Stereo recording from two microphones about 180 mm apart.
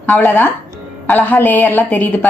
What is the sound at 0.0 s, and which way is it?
Speech, 10° left (ahead or behind).